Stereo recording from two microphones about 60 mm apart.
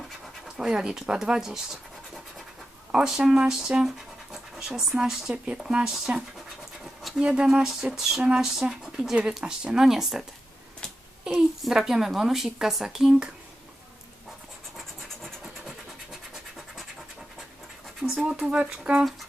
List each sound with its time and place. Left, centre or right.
0.6 s speech: centre
7.9 s a sound: centre
8.4 s speech: centre
11.3 s a woman's voice: centre
16.3 s scratch: centre
18.0 s speech: centre